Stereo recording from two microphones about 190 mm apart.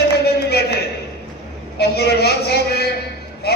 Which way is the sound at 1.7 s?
60° left (ahead or behind).